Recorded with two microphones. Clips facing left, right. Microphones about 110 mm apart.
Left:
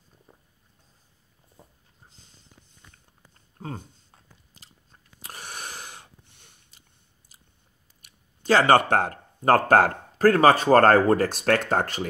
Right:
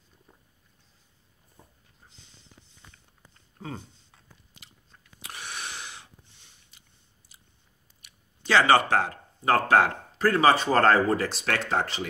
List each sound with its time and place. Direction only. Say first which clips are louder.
2.0 s a sound: even; 40° left (ahead or behind)
3.6 s chewing: left 2 dB; 45° left (ahead or behind)
8.0 s speech: even; 45° left (ahead or behind)